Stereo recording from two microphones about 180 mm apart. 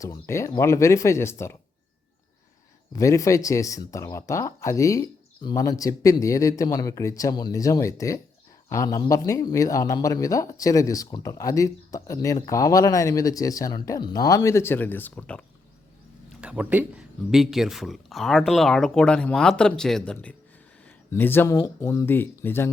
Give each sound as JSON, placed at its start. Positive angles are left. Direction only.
{"t": 0.0, "sound": "speech", "side_deg": 15}
{"t": 3.0, "sound": "speech", "side_deg": 15}
{"t": 16.4, "sound": "speech", "side_deg": -5}